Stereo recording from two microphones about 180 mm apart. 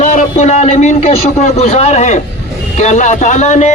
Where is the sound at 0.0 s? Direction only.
45° left (ahead or behind).